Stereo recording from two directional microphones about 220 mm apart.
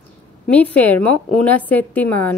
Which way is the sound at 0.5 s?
5° left (ahead or behind).